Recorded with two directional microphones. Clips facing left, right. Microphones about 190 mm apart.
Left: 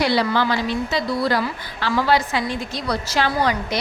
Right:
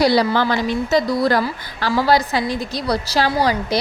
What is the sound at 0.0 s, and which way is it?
A woman's voice, 40° right (ahead or behind).